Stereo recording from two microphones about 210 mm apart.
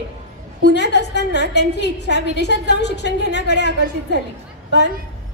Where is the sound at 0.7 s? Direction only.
55° left (ahead or behind).